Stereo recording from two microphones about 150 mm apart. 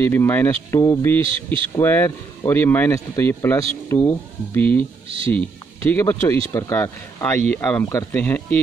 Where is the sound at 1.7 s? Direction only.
15° left (ahead or behind).